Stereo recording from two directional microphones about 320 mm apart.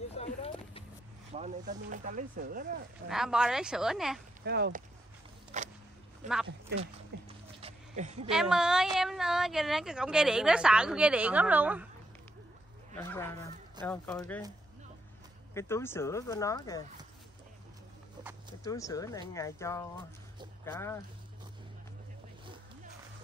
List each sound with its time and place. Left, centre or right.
0.2 s a sound: centre
1.3 s speech: right
3.1 s speech: centre
4.5 s speech: right
5.5 s a sound: right
6.2 s speech: right
7.6 s a sound: right
8.3 s speech: centre
12.9 s speech: centre
15.5 s speech: centre
18.6 s speech: centre